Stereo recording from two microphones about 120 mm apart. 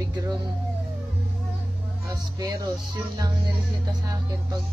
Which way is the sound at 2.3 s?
30° right (ahead or behind).